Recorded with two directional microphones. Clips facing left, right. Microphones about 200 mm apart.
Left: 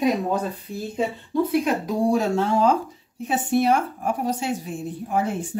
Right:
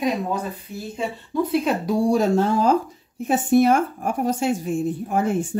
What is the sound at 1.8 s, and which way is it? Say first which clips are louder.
Speech: right 2 dB; 35° right (ahead or behind).